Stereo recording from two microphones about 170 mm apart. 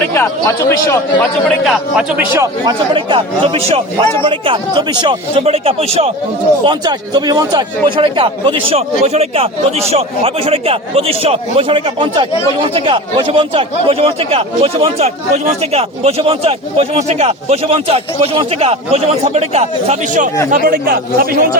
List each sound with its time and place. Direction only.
0.1 s speech: 15° left (ahead or behind)
1.6 s a man's voice: centre (ahead or behind)
2.9 s speech: 30° right (ahead or behind)
6.7 s speech: 25° right (ahead or behind); by 20.3 s 45° right (ahead or behind)
20.5 s speech: 60° right (ahead or behind)